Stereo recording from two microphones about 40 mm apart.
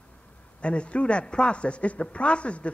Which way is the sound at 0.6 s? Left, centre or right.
Left.